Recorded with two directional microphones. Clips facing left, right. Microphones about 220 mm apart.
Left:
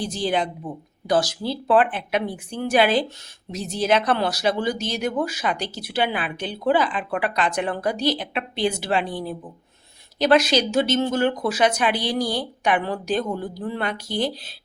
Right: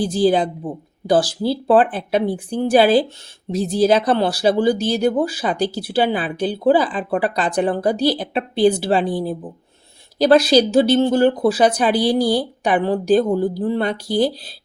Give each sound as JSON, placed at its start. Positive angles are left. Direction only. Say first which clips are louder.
{"t": 0.0, "sound": "speech", "louder": "right 8 dB", "side_deg": -35}